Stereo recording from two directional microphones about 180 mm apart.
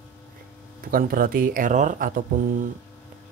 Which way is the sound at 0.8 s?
50° right (ahead or behind).